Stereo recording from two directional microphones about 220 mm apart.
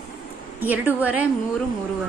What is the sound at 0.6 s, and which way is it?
Speech, 10° right (ahead or behind).